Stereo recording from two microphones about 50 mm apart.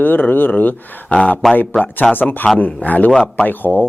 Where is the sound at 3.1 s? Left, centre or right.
Centre.